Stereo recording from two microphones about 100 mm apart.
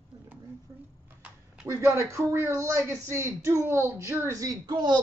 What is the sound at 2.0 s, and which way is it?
Speech, 25° right (ahead or behind).